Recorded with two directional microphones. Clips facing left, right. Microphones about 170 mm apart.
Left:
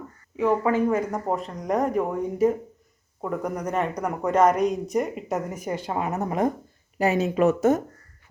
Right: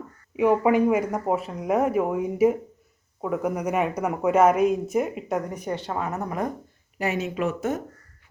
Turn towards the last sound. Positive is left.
turn(degrees=40)  # may be behind; listen again after turning